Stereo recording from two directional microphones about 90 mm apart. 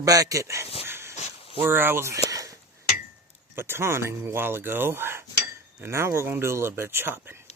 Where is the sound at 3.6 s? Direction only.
25° right (ahead or behind).